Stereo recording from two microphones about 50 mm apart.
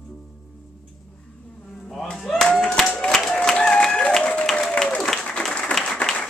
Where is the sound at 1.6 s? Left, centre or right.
Centre.